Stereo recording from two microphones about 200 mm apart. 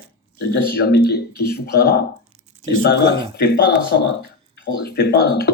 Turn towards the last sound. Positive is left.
turn(degrees=50)  # may be behind; listen again after turning